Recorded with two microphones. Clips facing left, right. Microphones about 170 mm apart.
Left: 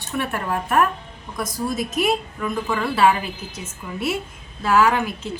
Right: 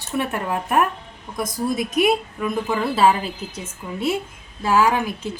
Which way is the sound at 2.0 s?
20° right (ahead or behind).